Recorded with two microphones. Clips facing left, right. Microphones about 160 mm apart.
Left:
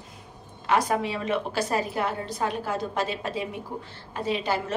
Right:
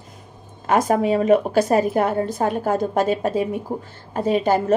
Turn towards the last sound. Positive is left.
turn(degrees=-45)  # may be behind; listen again after turning